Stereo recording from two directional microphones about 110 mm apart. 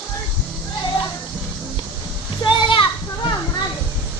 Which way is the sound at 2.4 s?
45° left (ahead or behind).